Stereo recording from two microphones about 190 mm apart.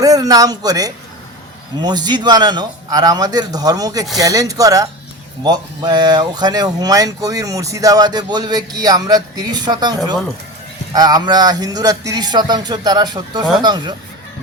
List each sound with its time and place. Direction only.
0.0 s speech: 20° right (ahead or behind)